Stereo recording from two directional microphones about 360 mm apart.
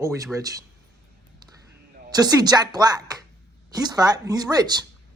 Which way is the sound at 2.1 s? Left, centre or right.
Centre.